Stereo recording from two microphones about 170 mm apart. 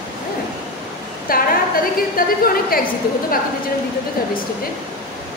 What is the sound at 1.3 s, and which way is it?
A woman's voice, 60° left (ahead or behind).